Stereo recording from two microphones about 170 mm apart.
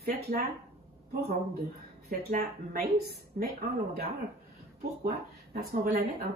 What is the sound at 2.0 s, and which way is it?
Speech, 55° right (ahead or behind).